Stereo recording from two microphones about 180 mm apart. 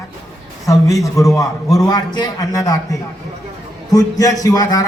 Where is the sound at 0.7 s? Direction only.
20° left (ahead or behind).